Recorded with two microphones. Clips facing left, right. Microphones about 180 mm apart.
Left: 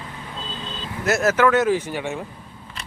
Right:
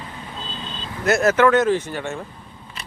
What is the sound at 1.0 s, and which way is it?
Speech, 5° left (ahead or behind).